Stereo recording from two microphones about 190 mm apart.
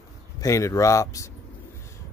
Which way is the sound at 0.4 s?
15° left (ahead or behind).